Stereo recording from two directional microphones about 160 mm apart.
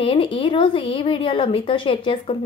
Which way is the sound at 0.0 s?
35° left (ahead or behind).